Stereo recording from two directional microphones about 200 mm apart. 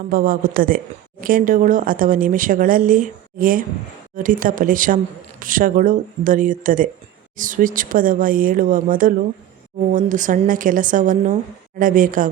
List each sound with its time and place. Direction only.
0.1 s a woman's voice: 45° right (ahead or behind)